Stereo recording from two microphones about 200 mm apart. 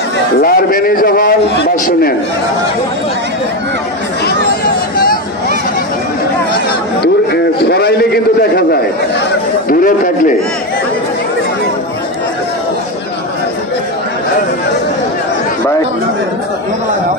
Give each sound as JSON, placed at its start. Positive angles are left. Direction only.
{"t": 0.4, "sound": "a man's voice", "side_deg": 45}
{"t": 4.9, "sound": "a sound", "side_deg": 45}
{"t": 7.6, "sound": "a man's voice", "side_deg": 55}
{"t": 9.7, "sound": "a man's voice", "side_deg": 40}